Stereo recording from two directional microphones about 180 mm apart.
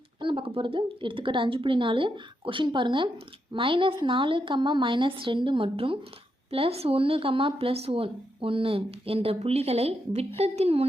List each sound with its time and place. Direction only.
0.2 s a woman's voice: 30° right (ahead or behind)